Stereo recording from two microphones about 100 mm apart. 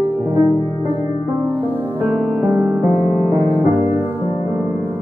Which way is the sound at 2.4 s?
20° right (ahead or behind).